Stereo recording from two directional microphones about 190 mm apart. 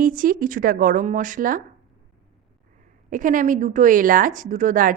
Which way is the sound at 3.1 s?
45° right (ahead or behind).